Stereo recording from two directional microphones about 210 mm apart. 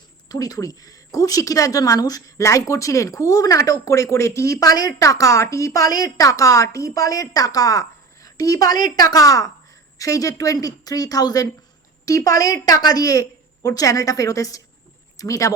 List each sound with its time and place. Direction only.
0.3 s a woman's voice: 15° left (ahead or behind)